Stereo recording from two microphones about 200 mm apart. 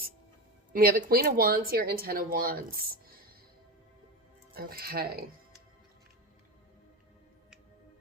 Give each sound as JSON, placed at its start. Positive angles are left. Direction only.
{"t": 0.7, "sound": "speech", "side_deg": -50}
{"t": 4.5, "sound": "speech", "side_deg": -50}